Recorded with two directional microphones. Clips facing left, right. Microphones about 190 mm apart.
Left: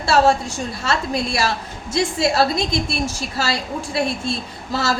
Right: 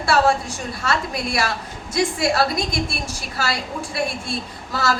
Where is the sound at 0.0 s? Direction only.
25° left (ahead or behind).